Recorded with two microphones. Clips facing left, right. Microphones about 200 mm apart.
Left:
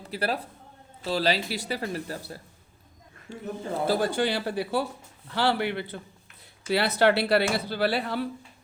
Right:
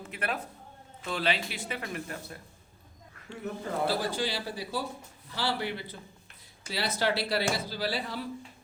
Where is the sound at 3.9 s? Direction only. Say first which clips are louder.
Left 9 dB; 60° left (ahead or behind).